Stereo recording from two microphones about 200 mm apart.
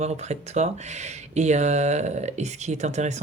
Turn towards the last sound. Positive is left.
turn(degrees=-35)  # may be behind; listen again after turning